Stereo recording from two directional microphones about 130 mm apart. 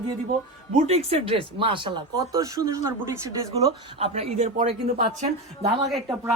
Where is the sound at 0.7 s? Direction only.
50° right (ahead or behind); by 3.7 s 25° right (ahead or behind).